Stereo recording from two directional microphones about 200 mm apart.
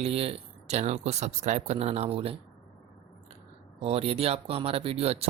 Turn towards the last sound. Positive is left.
turn(degrees=-30)  # may be behind; listen again after turning